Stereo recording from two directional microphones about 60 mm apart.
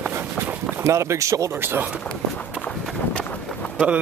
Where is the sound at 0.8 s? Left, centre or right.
Right.